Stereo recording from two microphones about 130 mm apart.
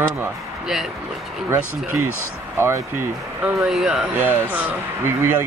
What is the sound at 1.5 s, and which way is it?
Speech, 20° right (ahead or behind).